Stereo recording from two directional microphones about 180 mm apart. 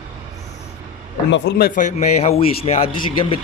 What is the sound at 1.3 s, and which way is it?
Speech, 65° left (ahead or behind).